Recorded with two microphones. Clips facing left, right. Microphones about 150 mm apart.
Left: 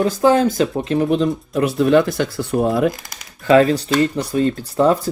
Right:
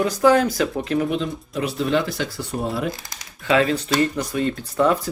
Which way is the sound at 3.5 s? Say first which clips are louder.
Left 6 dB; 40° left (ahead or behind).